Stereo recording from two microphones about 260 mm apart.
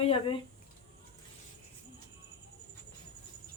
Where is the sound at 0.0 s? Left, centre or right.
Centre.